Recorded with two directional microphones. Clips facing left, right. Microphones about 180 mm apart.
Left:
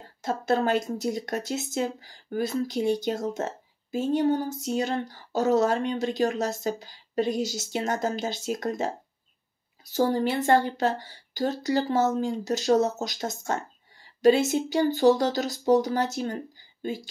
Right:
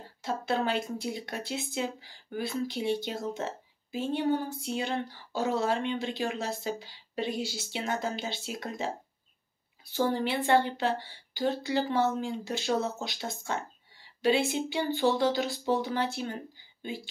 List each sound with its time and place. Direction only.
0.2 s speech: 45° left (ahead or behind)